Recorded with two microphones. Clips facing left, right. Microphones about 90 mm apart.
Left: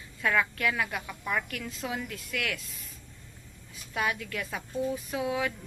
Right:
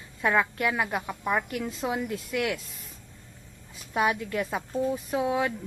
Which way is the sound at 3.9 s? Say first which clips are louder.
Right 5 dB; 20° right (ahead or behind).